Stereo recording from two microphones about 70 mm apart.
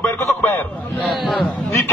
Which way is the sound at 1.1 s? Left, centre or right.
Centre.